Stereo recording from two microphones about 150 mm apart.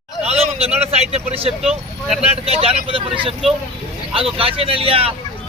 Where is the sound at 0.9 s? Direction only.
45° right (ahead or behind).